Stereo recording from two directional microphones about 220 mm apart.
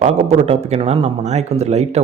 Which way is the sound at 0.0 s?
30° right (ahead or behind).